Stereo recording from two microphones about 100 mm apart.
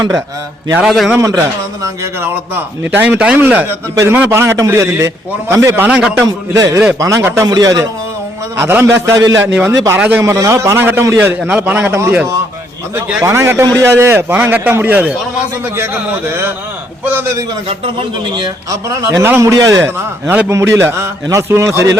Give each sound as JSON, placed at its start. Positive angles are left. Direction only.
{"t": 0.8, "sound": "a man's voice", "side_deg": -5}
{"t": 1.2, "sound": "a man's voice", "side_deg": -30}
{"t": 2.8, "sound": "a man's voice", "side_deg": -20}
{"t": 5.9, "sound": "speech", "side_deg": -10}
{"t": 6.2, "sound": "a man's voice", "side_deg": -35}
{"t": 7.4, "sound": "a man's voice", "side_deg": -40}
{"t": 8.5, "sound": "a man's voice", "side_deg": -25}
{"t": 10.2, "sound": "a man's voice", "side_deg": -35}
{"t": 13.2, "sound": "a man's voice", "side_deg": -25}
{"t": 18.3, "sound": "a man's voice", "side_deg": -40}